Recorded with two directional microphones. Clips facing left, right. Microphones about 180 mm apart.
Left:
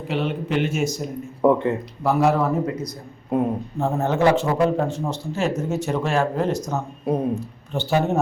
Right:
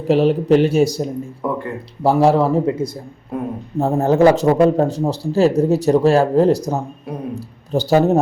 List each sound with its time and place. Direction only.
0.1 s a man's voice: 40° right (ahead or behind)
1.4 s speech: 25° left (ahead or behind)
2.0 s a man's voice: 30° right (ahead or behind)
3.3 s speech: 20° left (ahead or behind)
3.8 s a man's voice: 35° right (ahead or behind)